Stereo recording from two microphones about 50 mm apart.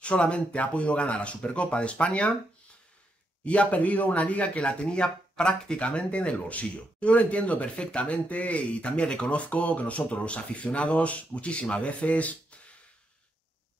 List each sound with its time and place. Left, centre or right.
0.0 s speech: left
3.4 s speech: left